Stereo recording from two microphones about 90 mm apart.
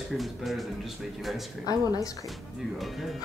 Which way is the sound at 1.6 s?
45° left (ahead or behind).